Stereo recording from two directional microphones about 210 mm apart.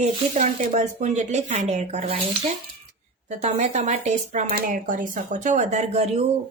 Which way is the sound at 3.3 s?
30° right (ahead or behind).